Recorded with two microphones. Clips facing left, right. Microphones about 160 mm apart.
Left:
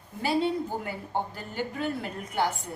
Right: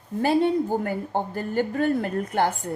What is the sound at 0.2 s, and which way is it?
Speech, 50° right (ahead or behind).